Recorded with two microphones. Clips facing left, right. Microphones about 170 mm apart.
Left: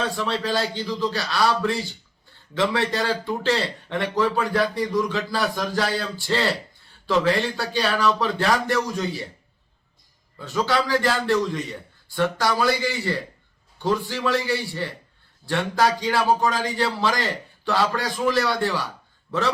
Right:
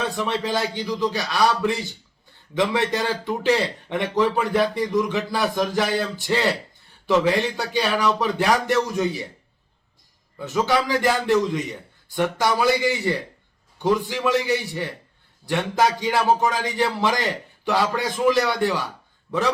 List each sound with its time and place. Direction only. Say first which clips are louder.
0.2 s a man's voice: right 1 dB; 20° right (ahead or behind)
10.3 s a man's voice: right 2 dB; 20° right (ahead or behind)